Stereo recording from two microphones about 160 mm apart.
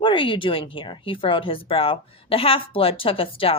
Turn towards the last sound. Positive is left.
turn(degrees=35)  # may be behind; listen again after turning